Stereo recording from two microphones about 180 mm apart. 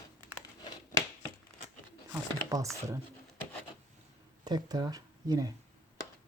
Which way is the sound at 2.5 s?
20° right (ahead or behind).